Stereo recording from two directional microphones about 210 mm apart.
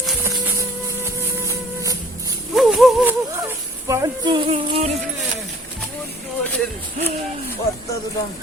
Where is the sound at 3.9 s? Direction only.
20° right (ahead or behind).